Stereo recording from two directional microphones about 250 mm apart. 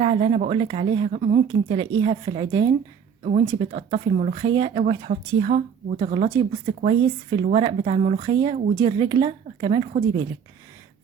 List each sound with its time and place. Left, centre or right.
0.0 s speech: right